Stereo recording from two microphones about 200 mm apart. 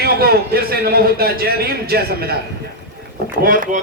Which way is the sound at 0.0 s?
50° right (ahead or behind).